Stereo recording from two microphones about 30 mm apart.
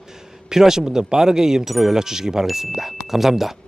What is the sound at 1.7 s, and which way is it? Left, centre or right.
Speech, centre.